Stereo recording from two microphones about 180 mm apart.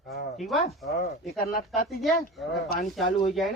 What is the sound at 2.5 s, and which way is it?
Speech, 55° left (ahead or behind).